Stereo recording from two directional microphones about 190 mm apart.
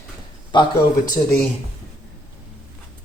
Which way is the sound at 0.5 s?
25° left (ahead or behind).